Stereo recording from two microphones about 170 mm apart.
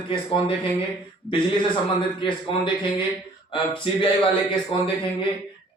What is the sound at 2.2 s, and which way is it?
A man's voice, 30° left (ahead or behind).